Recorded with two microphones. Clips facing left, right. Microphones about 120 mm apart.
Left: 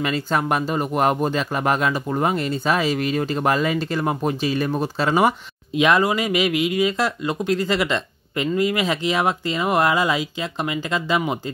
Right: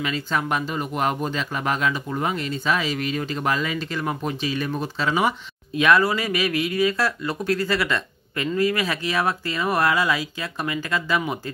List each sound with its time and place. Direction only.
0.0 s speech: 45° left (ahead or behind)
5.8 s speech: 20° left (ahead or behind)